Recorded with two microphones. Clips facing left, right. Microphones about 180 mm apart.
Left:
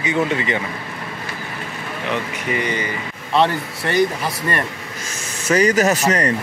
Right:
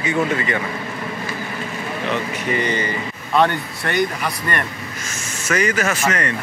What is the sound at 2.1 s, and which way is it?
Speech, 10° left (ahead or behind).